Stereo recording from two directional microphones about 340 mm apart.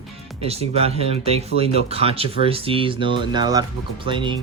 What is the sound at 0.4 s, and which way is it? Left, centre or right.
Speech, centre.